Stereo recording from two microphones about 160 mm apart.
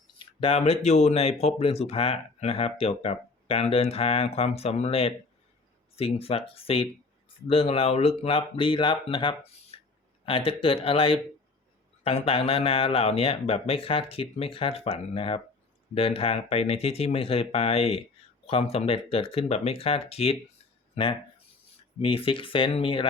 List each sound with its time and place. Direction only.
0.2 s speech: 35° left (ahead or behind)